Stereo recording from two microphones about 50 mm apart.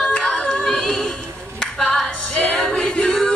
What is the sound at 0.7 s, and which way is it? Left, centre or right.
Music, centre.